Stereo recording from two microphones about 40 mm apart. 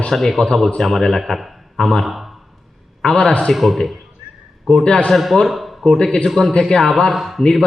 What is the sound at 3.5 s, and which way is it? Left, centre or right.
Speech, centre.